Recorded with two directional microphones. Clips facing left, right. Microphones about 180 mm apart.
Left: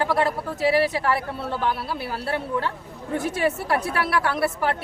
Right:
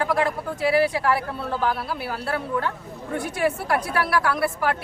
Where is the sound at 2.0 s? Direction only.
30° left (ahead or behind).